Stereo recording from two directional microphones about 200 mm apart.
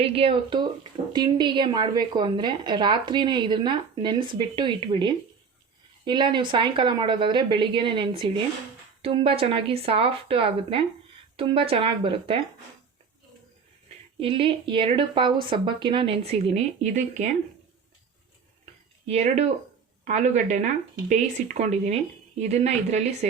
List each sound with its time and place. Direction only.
0.0 s a woman's voice: 25° right (ahead or behind)
14.2 s a woman's voice: 25° right (ahead or behind)
19.0 s speech: 30° right (ahead or behind)